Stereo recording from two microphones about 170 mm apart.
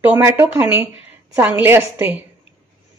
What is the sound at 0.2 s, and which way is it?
A woman's voice, 10° right (ahead or behind).